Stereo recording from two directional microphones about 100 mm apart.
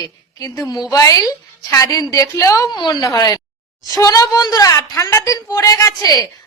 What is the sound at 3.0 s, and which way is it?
A woman's voice, 35° left (ahead or behind).